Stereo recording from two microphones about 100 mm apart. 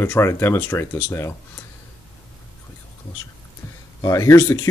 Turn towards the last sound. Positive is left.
turn(degrees=30)  # may be behind; listen again after turning